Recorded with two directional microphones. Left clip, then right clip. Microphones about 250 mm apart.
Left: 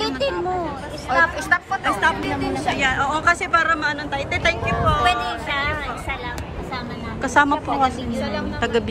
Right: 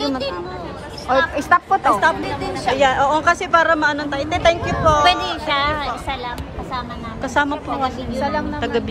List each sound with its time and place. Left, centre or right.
1.2 s a sound: right
2.8 s speech: centre
5.0 s a woman's voice: right
7.3 s a woman's voice: centre
8.2 s a woman's voice: right
8.5 s a woman's voice: centre